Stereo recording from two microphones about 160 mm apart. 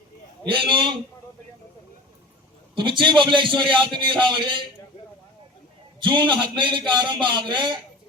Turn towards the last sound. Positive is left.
turn(degrees=-30)  # may be behind; listen again after turning